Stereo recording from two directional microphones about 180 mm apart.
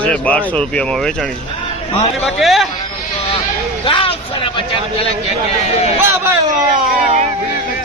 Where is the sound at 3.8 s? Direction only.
30° left (ahead or behind).